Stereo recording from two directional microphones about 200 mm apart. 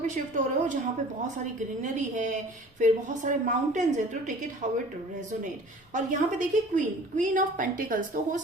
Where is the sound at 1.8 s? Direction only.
40° right (ahead or behind).